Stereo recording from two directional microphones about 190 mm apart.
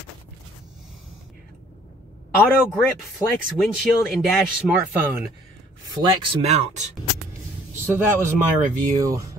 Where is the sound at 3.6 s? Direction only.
Centre (ahead or behind).